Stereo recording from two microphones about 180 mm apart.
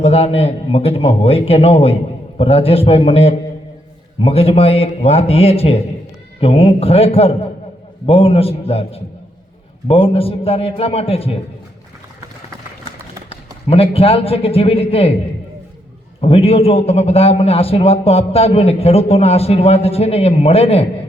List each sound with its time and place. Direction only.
0.0 s a man's voice: 35° left (ahead or behind)
13.3 s a man's voice: 35° left (ahead or behind)
16.2 s a man's voice: 35° left (ahead or behind)